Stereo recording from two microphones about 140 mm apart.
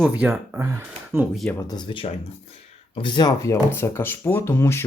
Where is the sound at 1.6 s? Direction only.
30° left (ahead or behind).